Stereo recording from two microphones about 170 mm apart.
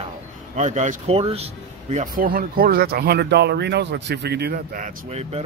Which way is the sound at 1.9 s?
50° right (ahead or behind).